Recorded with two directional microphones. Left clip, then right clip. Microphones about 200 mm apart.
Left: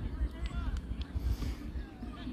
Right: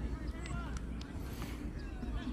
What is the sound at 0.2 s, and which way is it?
Run, 15° right (ahead or behind).